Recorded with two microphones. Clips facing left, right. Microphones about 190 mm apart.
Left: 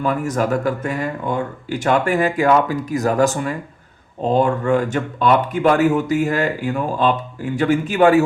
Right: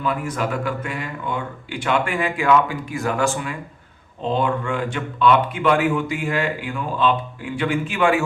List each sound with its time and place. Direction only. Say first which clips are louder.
0.0 s speech: left 4 dB; 40° left (ahead or behind)